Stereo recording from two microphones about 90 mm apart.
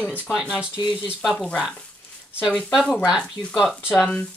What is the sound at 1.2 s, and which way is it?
Speech, 5° left (ahead or behind).